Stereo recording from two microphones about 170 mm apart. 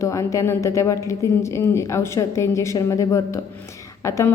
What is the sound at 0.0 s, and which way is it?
A woman's voice, 20° left (ahead or behind).